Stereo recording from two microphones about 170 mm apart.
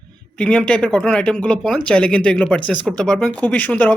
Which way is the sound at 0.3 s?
5° left (ahead or behind).